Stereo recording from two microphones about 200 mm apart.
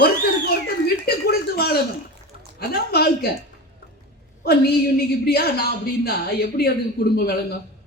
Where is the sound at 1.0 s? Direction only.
50° left (ahead or behind).